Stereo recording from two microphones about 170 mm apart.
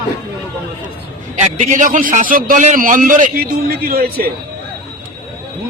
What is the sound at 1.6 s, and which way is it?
A man's voice, 45° right (ahead or behind).